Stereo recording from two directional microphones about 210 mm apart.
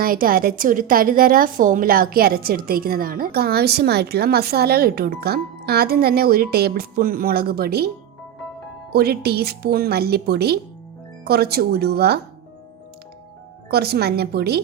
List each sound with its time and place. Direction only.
0.0 s a woman's voice: 45° right (ahead or behind)
8.9 s a woman's voice: 50° right (ahead or behind)
13.7 s a woman's voice: 50° right (ahead or behind)